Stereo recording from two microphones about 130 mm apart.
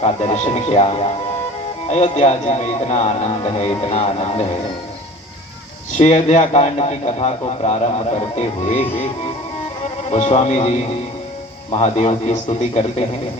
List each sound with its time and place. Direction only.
0.0 s a man's voice: 55° left (ahead or behind)
6.0 s a man's voice: 55° left (ahead or behind)
10.1 s a man's voice: 60° left (ahead or behind)